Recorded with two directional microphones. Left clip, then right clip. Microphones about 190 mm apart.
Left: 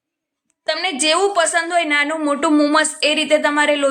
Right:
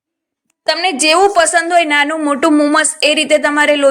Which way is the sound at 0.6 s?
25° right (ahead or behind).